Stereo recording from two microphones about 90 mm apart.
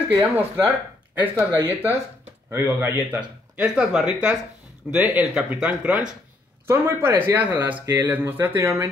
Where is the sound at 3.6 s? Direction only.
10° right (ahead or behind).